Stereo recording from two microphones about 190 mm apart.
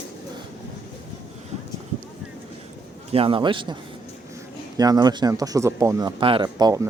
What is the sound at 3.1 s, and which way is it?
Speech, 30° right (ahead or behind).